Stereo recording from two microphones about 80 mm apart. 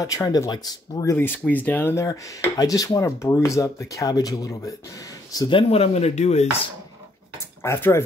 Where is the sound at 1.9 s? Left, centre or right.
Left.